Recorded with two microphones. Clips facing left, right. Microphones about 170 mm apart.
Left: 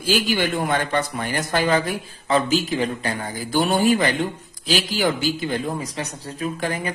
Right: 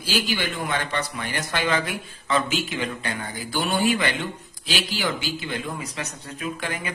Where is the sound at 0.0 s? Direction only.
45° left (ahead or behind).